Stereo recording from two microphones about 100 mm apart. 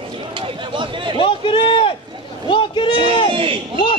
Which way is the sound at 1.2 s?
60° left (ahead or behind).